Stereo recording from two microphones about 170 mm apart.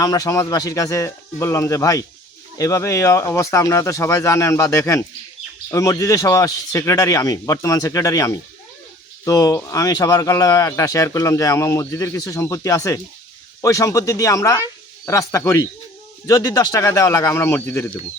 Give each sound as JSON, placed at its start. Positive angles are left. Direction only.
{"t": 0.0, "sound": "a man's voice", "side_deg": 20}